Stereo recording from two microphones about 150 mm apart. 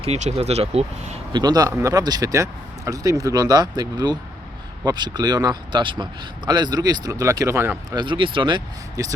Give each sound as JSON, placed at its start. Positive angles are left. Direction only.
{"t": 0.0, "sound": "speech", "side_deg": -45}
{"t": 1.3, "sound": "a man's voice", "side_deg": -25}
{"t": 7.9, "sound": "speech", "side_deg": -30}